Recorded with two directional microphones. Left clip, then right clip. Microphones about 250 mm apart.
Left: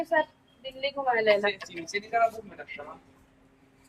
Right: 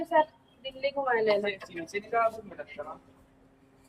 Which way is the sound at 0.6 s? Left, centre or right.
Centre.